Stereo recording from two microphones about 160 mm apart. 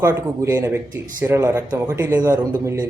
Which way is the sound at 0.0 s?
15° right (ahead or behind).